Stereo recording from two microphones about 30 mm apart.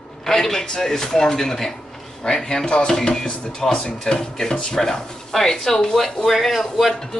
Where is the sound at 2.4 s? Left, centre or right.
Left.